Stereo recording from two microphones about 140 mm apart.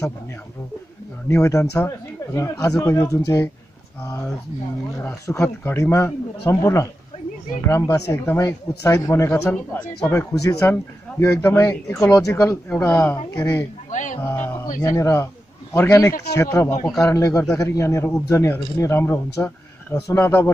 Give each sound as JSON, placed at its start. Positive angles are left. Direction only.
{"t": 1.3, "sound": "speech", "side_deg": 20}
{"t": 5.0, "sound": "speech", "side_deg": 20}
{"t": 13.8, "sound": "music", "side_deg": 65}
{"t": 14.2, "sound": "speech", "side_deg": 15}